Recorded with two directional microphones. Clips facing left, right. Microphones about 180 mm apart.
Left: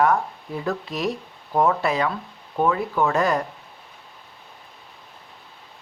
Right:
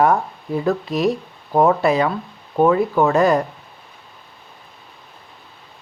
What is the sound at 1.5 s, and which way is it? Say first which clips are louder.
Speech: right 5 dB; 30° right (ahead or behind).